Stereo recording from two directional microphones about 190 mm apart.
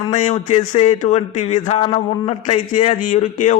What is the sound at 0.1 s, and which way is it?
A man's voice, 40° left (ahead or behind).